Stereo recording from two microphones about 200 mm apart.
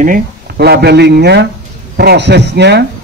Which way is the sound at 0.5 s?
55° right (ahead or behind).